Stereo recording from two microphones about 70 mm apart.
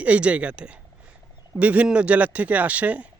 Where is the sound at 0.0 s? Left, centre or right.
Centre.